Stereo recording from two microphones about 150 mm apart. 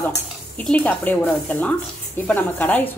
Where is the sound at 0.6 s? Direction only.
10° left (ahead or behind).